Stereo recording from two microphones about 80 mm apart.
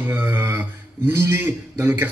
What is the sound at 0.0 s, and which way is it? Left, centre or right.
Speech, right.